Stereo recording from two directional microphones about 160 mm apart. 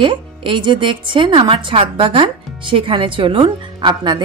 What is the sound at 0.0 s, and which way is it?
A woman's voice, 30° right (ahead or behind).